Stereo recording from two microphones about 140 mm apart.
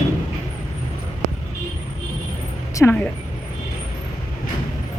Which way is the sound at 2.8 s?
25° left (ahead or behind).